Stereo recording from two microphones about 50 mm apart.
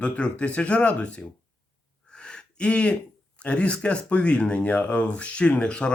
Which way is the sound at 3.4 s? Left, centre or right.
Left.